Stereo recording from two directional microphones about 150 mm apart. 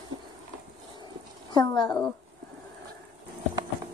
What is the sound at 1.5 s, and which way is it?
Speech, 30° left (ahead or behind).